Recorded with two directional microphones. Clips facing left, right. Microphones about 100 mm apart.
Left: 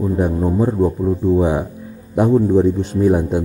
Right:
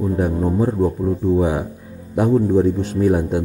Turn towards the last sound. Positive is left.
turn(degrees=20)  # may be behind; listen again after turning